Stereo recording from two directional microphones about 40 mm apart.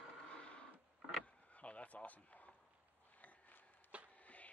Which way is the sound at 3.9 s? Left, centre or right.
Right.